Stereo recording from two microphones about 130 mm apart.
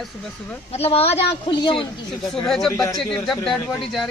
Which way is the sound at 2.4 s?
Centre (ahead or behind).